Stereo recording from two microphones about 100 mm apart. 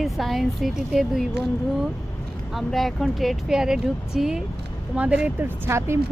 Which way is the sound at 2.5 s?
Centre (ahead or behind).